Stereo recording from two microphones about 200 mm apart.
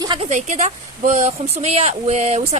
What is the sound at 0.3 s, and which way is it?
Speech, 35° right (ahead or behind).